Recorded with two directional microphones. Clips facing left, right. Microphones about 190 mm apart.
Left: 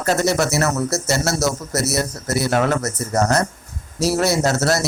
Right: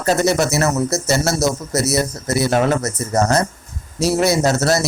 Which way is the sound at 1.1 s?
20° right (ahead or behind).